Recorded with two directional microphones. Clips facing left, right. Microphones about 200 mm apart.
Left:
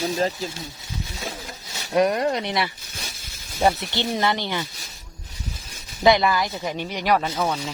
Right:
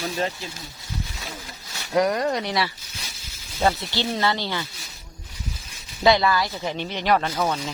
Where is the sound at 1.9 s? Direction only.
20° left (ahead or behind).